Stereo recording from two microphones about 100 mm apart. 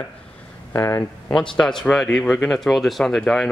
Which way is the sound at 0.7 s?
25° left (ahead or behind).